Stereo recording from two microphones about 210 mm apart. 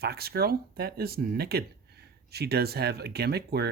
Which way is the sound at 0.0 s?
50° right (ahead or behind).